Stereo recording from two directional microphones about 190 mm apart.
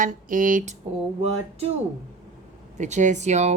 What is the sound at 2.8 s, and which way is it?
Speech, 40° right (ahead or behind).